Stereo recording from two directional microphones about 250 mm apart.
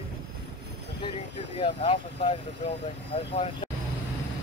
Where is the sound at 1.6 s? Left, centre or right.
Left.